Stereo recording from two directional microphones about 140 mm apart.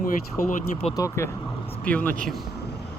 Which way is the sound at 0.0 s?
65° left (ahead or behind).